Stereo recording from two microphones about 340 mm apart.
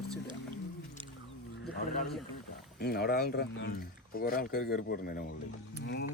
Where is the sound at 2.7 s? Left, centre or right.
Left.